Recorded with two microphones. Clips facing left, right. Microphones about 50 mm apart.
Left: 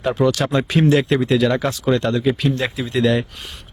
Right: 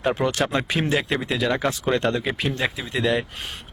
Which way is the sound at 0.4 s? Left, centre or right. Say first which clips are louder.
Left 6 dB; centre.